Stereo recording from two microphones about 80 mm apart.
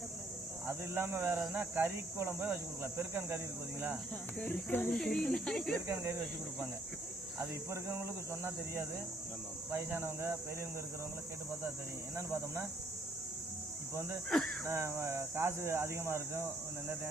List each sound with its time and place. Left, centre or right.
0.7 s speech: right
4.4 s speech: left
4.9 s speech: centre
5.9 s speech: right
7.3 s speech: right
12.1 s speech: right
14.3 s speech: centre
14.7 s speech: right